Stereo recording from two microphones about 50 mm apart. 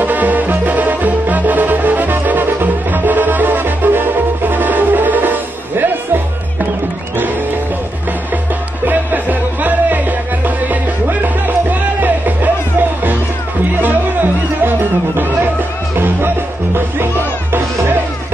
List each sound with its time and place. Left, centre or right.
0.0 s music: right
8.8 s music: right
13.7 s music: right
16.7 s music: right